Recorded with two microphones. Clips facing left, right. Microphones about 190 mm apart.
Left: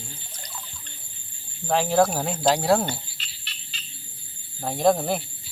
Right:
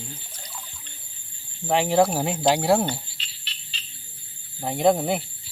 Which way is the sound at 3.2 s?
50° left (ahead or behind).